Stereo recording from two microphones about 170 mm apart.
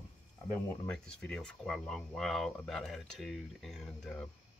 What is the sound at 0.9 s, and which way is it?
Speech, 5° left (ahead or behind).